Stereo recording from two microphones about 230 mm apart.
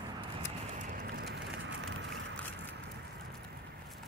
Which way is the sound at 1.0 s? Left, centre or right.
Right.